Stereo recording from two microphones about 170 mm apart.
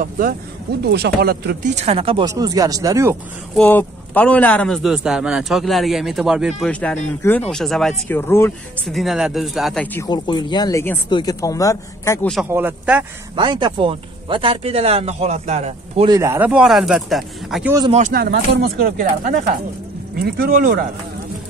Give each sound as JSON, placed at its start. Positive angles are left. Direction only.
{"t": 0.0, "sound": "speech", "side_deg": -55}
{"t": 0.8, "sound": "speech", "side_deg": -75}
{"t": 1.8, "sound": "speech", "side_deg": -35}
{"t": 2.2, "sound": "speech", "side_deg": -20}
{"t": 3.5, "sound": "a man's voice", "side_deg": 10}
{"t": 6.7, "sound": "a man's voice", "side_deg": 5}
{"t": 8.1, "sound": "speech", "side_deg": 15}
{"t": 8.8, "sound": "a man's voice", "side_deg": 0}
{"t": 9.9, "sound": "speech", "side_deg": 25}
{"t": 12.4, "sound": "speech", "side_deg": -10}
{"t": 13.4, "sound": "speech", "side_deg": -25}
{"t": 16.1, "sound": "a man's voice", "side_deg": -15}
{"t": 18.1, "sound": "speech", "side_deg": -70}
{"t": 20.2, "sound": "speech", "side_deg": -60}